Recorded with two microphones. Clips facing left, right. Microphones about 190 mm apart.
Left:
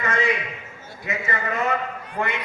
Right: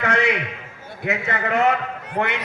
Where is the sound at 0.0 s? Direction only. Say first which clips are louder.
Right 3 dB; 70° right (ahead or behind).